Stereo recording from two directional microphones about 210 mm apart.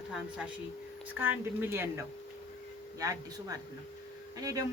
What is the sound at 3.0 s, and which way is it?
A woman's voice, 15° right (ahead or behind).